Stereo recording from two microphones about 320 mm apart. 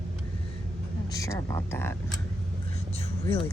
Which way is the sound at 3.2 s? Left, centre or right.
Centre.